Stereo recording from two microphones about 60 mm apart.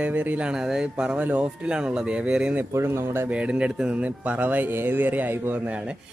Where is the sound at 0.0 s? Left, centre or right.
Right.